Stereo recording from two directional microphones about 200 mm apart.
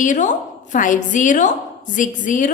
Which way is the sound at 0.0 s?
40° left (ahead or behind).